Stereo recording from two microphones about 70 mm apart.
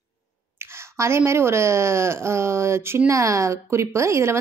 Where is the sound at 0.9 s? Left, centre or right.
Right.